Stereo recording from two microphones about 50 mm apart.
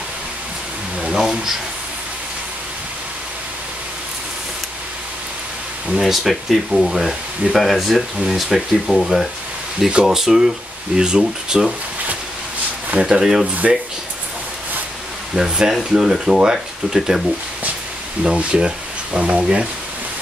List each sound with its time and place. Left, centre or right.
1.0 s a sound: centre
5.9 s speech: centre
13.0 s speech: centre
15.3 s speech: centre
18.2 s speech: centre